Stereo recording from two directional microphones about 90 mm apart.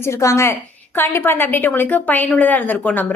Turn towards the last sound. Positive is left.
turn(degrees=20)  # may be behind; listen again after turning